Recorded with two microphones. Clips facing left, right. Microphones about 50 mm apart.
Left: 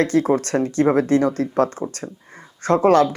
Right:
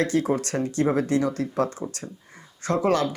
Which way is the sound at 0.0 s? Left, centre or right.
Left.